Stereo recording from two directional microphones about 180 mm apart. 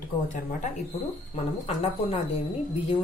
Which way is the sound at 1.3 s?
35° left (ahead or behind).